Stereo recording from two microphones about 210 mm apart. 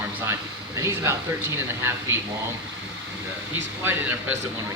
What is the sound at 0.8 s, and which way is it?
Speech, 15° right (ahead or behind).